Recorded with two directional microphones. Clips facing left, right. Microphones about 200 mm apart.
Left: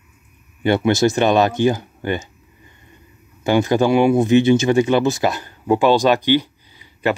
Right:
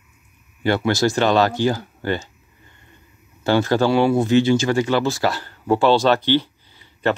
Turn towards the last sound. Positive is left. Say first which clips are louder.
# left 1 dB
turn(degrees=10)  # may be behind; listen again after turning